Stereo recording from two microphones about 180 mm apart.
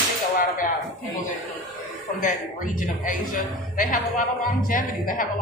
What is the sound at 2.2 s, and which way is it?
A man's voice, 45° left (ahead or behind).